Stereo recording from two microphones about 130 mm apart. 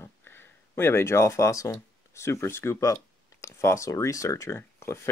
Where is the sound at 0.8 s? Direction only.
20° left (ahead or behind).